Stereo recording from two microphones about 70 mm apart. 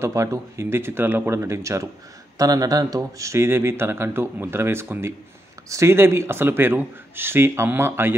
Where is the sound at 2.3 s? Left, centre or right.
Right.